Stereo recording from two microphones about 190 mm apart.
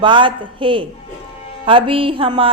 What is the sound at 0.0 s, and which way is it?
A woman's voice, 25° right (ahead or behind).